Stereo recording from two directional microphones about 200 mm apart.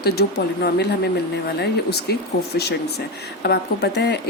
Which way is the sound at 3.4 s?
55° left (ahead or behind).